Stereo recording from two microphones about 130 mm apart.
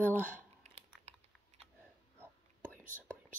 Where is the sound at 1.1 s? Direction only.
55° right (ahead or behind).